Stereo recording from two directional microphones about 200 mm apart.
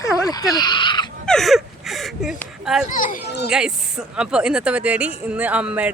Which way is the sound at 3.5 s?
5° right (ahead or behind).